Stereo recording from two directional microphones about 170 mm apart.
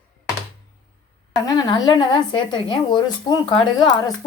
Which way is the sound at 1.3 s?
20° left (ahead or behind).